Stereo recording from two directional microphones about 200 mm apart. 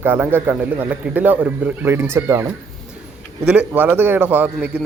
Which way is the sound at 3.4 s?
10° right (ahead or behind).